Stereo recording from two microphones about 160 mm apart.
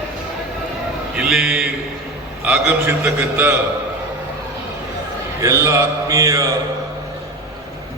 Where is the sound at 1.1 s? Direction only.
5° right (ahead or behind).